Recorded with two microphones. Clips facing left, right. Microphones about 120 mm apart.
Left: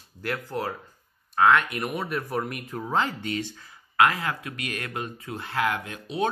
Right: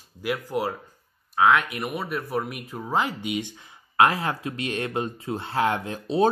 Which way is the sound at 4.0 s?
30° right (ahead or behind).